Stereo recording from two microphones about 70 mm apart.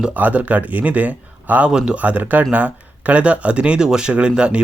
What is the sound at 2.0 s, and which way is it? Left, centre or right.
Speech, right.